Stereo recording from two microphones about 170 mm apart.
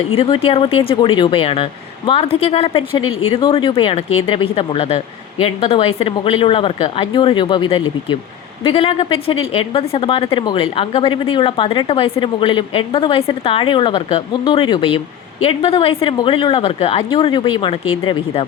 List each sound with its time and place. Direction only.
0.2 s speech: 35° left (ahead or behind)